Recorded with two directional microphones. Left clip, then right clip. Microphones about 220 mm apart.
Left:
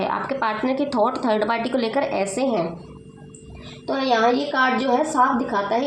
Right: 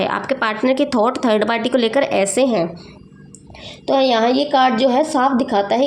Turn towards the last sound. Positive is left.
turn(degrees=-45)  # may be behind; listen again after turning